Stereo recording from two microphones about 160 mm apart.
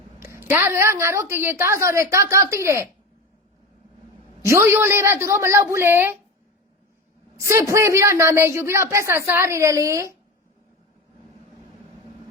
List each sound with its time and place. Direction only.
0.4 s a woman's voice: 15° right (ahead or behind)
4.4 s a woman's voice: 20° right (ahead or behind)
7.3 s a woman's voice: 20° right (ahead or behind)